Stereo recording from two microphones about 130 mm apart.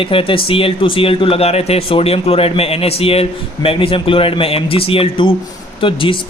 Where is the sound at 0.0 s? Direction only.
45° left (ahead or behind).